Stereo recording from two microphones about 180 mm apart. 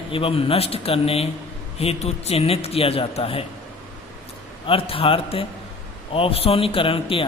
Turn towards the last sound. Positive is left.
turn(degrees=30)  # may be behind; listen again after turning